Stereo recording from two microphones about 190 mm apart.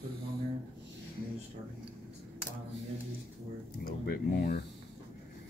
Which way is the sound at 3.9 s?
50° left (ahead or behind).